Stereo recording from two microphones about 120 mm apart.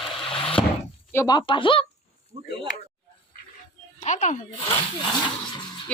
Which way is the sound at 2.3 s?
60° right (ahead or behind).